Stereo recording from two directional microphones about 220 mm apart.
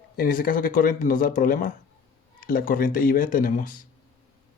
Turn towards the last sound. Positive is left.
turn(degrees=40)  # may be behind; listen again after turning